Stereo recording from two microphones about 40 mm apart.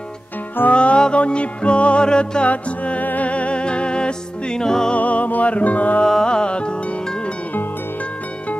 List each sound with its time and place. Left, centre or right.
0.7 s music: left
2.5 s music: left; by 4.9 s centre
4.9 s music: left
6.0 s music: centre